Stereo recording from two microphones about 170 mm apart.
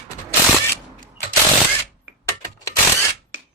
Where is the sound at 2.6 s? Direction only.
15° left (ahead or behind).